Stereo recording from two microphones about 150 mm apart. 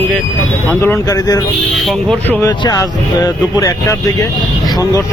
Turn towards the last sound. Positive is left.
turn(degrees=20)  # may be behind; listen again after turning